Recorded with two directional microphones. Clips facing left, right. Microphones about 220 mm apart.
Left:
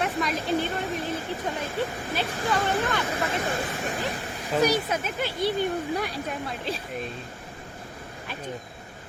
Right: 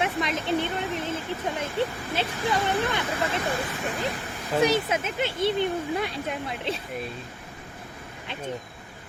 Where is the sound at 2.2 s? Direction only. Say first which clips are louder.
Right 2 dB; 25° right (ahead or behind).